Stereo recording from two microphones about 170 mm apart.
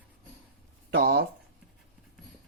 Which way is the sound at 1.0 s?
60° right (ahead or behind).